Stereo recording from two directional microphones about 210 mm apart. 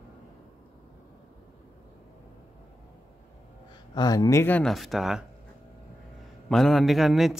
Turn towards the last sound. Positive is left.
turn(degrees=0)  # may be behind; listen again after turning